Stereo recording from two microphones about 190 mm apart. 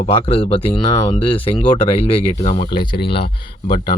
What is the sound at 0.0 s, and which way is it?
Speech, 30° left (ahead or behind).